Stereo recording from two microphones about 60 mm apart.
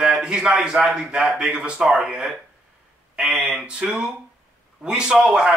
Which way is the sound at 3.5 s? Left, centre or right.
Centre.